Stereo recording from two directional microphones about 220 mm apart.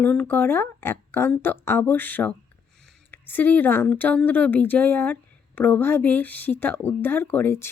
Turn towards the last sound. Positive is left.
turn(degrees=10)  # may be behind; listen again after turning